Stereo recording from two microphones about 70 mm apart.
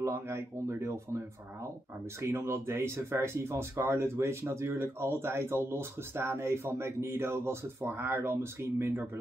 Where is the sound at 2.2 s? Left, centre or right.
Right.